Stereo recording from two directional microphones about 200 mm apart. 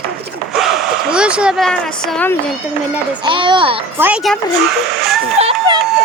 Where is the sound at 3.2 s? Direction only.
25° right (ahead or behind).